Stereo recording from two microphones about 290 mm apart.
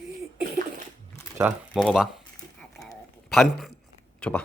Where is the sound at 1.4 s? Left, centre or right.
Centre.